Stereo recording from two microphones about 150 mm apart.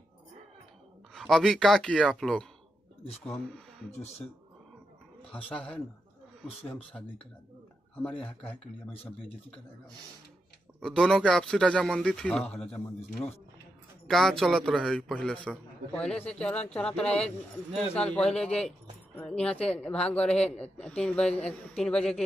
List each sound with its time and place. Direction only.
1.1 s speech: centre (ahead or behind)
3.0 s speech: 40° left (ahead or behind)
3.3 s speech: 5° left (ahead or behind)
5.5 s speech: 10° left (ahead or behind)
6.9 s speech: 5° left (ahead or behind)
10.8 s speech: 5° left (ahead or behind)
14.0 s speech: centre (ahead or behind)